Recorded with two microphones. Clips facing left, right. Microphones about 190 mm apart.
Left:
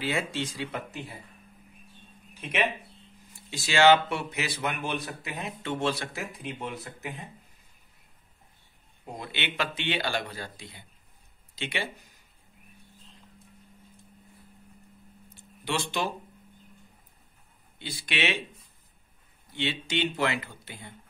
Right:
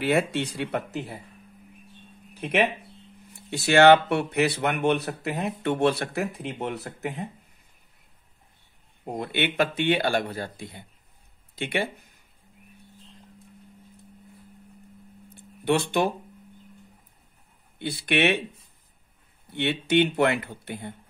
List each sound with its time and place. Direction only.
0.0 s speech: 60° right (ahead or behind)
2.3 s speech: 60° right (ahead or behind)
9.0 s a man's voice: 55° right (ahead or behind)
15.3 s a sound: 60° right (ahead or behind)
17.7 s speech: 60° right (ahead or behind)
19.5 s speech: 60° right (ahead or behind)